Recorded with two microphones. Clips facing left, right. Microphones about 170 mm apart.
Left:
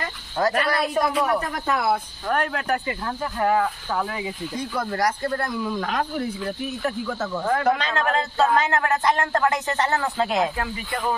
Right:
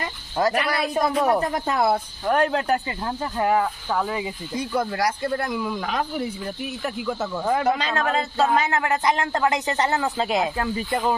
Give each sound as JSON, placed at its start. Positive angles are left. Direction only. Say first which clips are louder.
{"t": 0.4, "sound": "a man's voice", "louder": "even", "side_deg": -15}
{"t": 1.1, "sound": "speech", "louder": "right 3 dB", "side_deg": -30}
{"t": 4.7, "sound": "a man's voice", "louder": "right 1 dB", "side_deg": -10}